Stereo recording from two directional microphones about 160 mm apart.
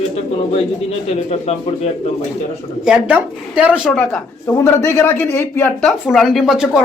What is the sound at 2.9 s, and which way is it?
Speech, 5° right (ahead or behind).